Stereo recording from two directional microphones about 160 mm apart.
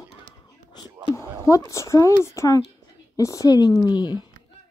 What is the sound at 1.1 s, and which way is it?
Speech, 15° left (ahead or behind).